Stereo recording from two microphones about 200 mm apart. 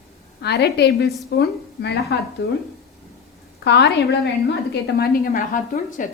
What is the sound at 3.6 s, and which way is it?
A woman's voice, 60° left (ahead or behind).